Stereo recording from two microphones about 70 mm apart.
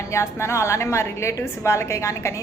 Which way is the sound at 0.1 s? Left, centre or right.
Left.